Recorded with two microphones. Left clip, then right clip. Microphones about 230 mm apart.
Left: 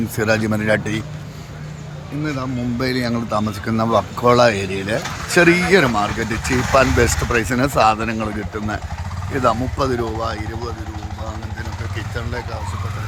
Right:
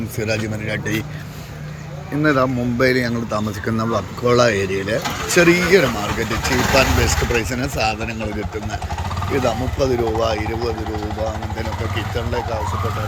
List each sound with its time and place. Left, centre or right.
0.2 s speech: centre
2.2 s speech: centre
9.3 s speech: centre